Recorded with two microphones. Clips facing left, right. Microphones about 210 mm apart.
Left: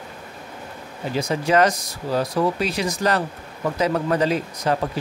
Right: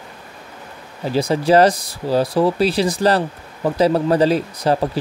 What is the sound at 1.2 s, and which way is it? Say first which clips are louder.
Speech: right 5 dB; 35° right (ahead or behind).